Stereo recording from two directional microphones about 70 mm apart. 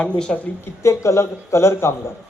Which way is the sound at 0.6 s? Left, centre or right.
Left.